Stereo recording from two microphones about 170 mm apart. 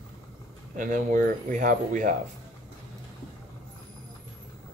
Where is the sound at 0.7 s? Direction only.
50° right (ahead or behind).